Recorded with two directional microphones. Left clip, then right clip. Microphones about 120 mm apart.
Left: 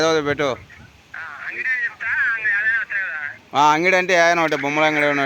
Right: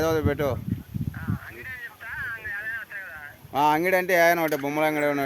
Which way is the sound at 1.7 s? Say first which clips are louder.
Left 15 dB; 40° left (ahead or behind).